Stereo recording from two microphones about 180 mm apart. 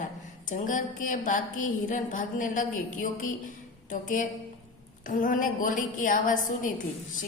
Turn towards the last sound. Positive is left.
turn(degrees=45)  # may be behind; listen again after turning